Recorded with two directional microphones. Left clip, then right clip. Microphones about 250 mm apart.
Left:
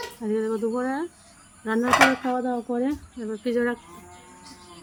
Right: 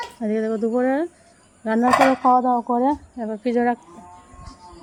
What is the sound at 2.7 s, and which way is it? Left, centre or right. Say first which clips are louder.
Speech: right 7 dB; centre.